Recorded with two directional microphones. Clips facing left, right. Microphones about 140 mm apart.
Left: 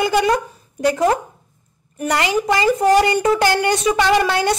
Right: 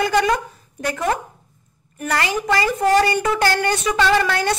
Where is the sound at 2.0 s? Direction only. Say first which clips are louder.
Left 3 dB; 20° left (ahead or behind).